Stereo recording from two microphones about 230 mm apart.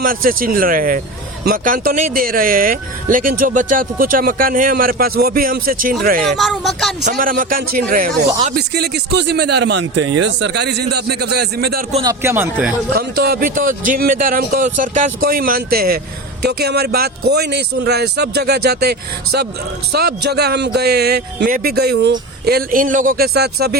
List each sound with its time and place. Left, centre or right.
0.0 s a man's voice: right
6.2 s speech: centre
7.0 s a man's voice: right
11.9 s a man's voice: right
12.2 s a man's voice: centre
12.9 s a man's voice: right